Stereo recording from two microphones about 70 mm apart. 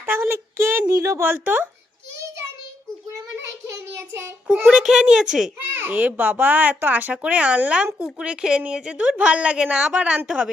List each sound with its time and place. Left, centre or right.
0.0 s a sound: right
1.3 s a child's voice: right
4.6 s a woman's voice: centre
5.7 s a child's voice: right